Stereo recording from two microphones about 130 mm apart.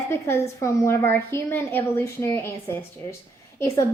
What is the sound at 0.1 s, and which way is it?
A woman's voice, 20° left (ahead or behind).